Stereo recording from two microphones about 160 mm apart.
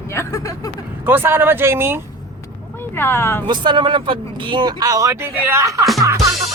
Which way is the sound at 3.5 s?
30° right (ahead or behind).